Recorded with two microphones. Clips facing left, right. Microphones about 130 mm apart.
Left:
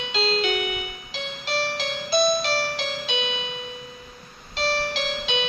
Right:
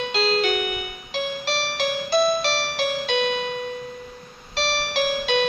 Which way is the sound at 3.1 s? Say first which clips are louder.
Right 6 dB; 50° right (ahead or behind).